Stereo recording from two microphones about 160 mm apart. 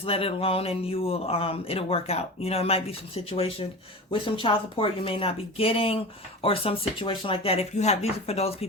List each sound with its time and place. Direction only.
0.0 s speech: 35° left (ahead or behind)